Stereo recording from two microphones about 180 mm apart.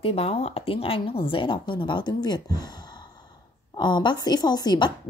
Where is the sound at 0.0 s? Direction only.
35° left (ahead or behind).